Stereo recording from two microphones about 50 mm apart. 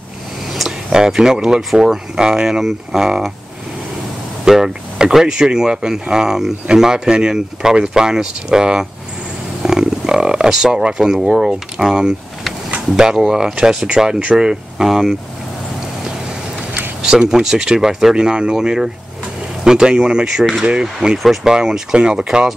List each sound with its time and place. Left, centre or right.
0.5 s speech: centre
4.5 s speech: centre
17.0 s speech: centre